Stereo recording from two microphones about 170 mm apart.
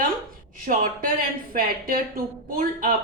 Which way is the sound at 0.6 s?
55° right (ahead or behind).